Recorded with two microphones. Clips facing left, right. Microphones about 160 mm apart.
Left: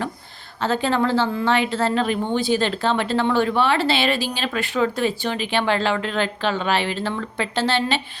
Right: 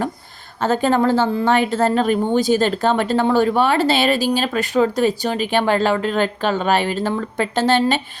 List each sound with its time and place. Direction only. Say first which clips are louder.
0.6 s a woman's voice: right 4 dB; 45° right (ahead or behind)